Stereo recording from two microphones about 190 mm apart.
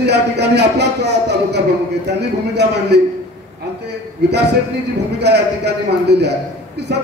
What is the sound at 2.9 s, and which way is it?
Speech, 60° right (ahead or behind).